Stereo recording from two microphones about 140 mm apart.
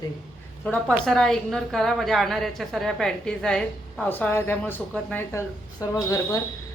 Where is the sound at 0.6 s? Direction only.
10° left (ahead or behind).